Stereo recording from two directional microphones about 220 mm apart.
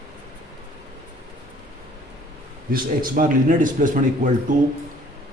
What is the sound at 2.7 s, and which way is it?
Speech, 40° right (ahead or behind).